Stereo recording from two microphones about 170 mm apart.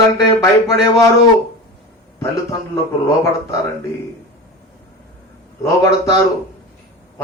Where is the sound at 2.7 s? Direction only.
20° left (ahead or behind).